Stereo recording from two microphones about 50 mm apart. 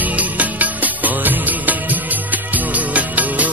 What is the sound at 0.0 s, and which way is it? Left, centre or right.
Music, right.